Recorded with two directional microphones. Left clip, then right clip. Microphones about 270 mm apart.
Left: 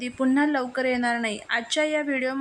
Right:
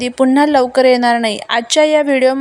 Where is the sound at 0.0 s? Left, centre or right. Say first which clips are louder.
Right 11 dB; right.